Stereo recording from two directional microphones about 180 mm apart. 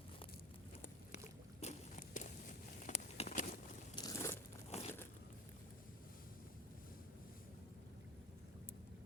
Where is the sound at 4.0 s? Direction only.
20° left (ahead or behind).